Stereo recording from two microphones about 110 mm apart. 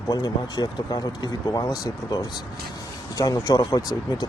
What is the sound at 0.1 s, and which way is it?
Speech, 35° left (ahead or behind).